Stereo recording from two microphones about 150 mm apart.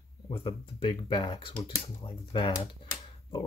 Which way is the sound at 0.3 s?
40° left (ahead or behind).